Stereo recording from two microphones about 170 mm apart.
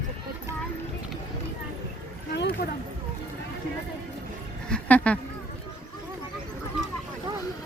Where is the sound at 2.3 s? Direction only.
80° left.